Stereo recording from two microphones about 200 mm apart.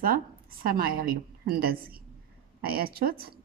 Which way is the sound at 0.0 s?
45° right (ahead or behind).